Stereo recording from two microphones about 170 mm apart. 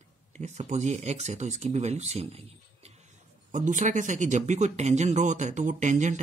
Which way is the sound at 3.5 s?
50° right (ahead or behind).